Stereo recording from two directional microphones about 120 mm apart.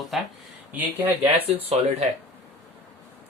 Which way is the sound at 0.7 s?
15° right (ahead or behind).